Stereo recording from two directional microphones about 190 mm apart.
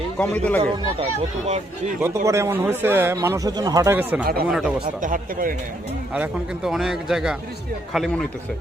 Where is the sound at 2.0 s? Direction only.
15° right (ahead or behind).